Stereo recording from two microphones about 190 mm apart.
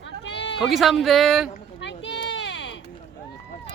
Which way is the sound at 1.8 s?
70° left (ahead or behind).